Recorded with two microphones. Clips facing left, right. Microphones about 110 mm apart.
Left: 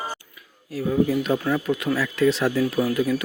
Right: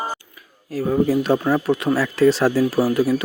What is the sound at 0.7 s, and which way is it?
Speech, 40° right (ahead or behind).